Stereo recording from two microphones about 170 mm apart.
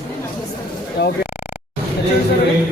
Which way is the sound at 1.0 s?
85° left.